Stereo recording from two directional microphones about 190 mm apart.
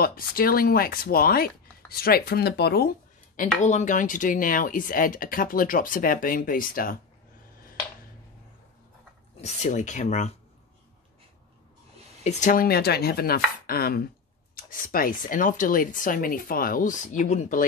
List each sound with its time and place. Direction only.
0.0 s speech: 50° left (ahead or behind)
3.3 s speech: 40° left (ahead or behind)
9.4 s speech: 40° left (ahead or behind)
12.2 s speech: 40° left (ahead or behind)